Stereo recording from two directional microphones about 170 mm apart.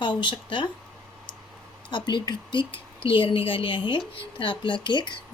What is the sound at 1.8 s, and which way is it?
A woman's voice, 25° left (ahead or behind).